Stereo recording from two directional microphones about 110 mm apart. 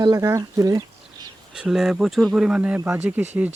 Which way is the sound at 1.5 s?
5° right (ahead or behind).